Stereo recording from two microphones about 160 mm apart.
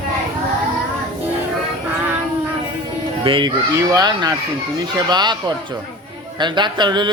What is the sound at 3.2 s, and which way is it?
Speech, 30° right (ahead or behind).